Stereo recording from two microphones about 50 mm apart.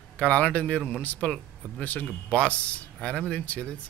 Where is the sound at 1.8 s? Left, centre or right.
Left.